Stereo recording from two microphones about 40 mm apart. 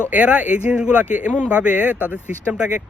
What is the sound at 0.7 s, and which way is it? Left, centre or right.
Speech, right.